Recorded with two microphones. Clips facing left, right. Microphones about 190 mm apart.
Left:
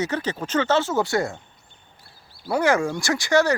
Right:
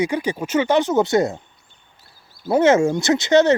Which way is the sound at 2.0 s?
45° right (ahead or behind).